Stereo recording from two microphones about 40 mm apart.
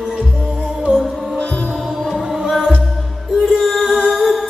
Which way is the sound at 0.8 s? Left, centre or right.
Centre.